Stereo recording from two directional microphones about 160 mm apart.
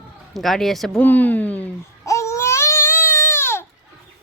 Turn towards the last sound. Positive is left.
turn(degrees=15)  # may be behind; listen again after turning